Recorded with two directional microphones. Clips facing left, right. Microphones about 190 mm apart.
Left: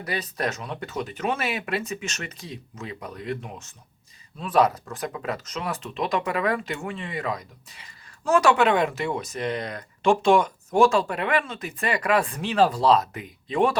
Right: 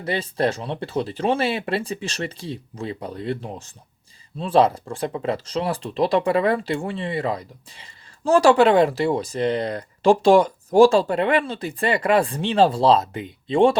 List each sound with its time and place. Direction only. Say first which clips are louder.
0.0 s speech: right 6 dB; 30° right (ahead or behind)